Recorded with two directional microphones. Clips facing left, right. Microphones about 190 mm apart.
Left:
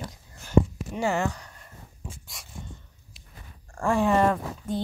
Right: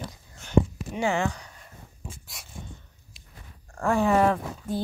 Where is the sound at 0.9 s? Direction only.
5° left (ahead or behind).